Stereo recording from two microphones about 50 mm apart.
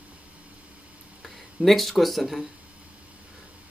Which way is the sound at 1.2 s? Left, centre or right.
Centre.